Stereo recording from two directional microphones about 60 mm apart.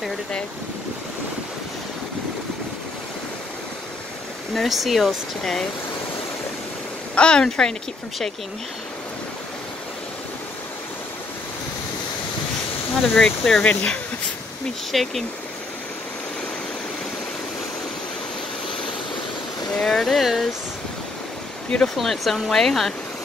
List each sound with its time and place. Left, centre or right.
4.6 s speech: centre
7.2 s speech: centre
13.1 s speech: centre
14.9 s speech: centre
19.8 s speech: centre
21.8 s speech: centre